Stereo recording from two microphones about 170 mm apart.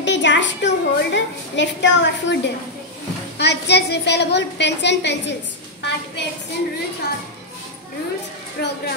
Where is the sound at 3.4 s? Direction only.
75° left (ahead or behind).